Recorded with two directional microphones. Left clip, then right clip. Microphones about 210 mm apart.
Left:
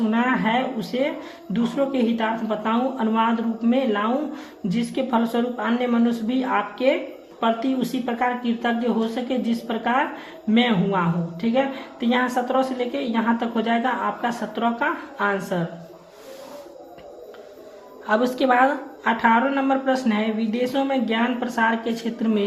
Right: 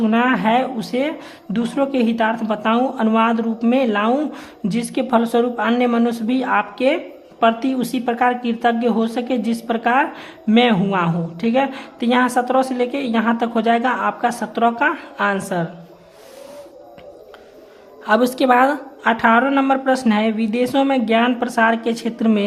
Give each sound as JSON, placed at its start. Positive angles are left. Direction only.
{"t": 0.1, "sound": "speech", "side_deg": -35}
{"t": 18.0, "sound": "speech", "side_deg": -30}